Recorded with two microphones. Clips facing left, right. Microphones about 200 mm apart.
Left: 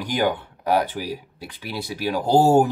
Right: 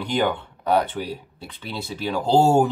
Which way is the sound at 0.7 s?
5° left (ahead or behind).